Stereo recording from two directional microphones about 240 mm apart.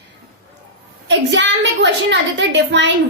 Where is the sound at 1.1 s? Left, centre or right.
Right.